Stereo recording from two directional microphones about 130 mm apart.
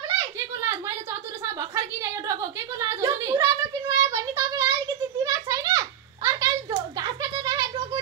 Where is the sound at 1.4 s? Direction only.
25° right (ahead or behind).